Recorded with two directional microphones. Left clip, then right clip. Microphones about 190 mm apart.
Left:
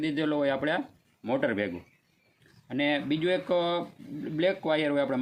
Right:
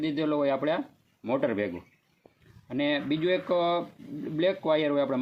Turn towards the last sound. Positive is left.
turn(degrees=25)  # may be behind; listen again after turning